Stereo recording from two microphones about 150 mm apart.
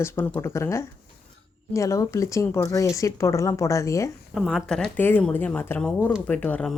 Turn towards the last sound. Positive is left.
turn(degrees=10)  # may be behind; listen again after turning